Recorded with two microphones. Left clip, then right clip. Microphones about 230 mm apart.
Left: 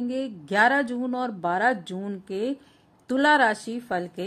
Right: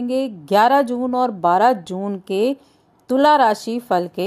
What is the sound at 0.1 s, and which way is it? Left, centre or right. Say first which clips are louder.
A woman's voice: right 12 dB; centre.